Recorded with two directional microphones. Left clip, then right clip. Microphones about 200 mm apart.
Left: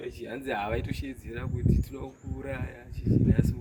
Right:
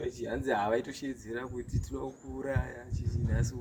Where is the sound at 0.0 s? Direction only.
10° left (ahead or behind).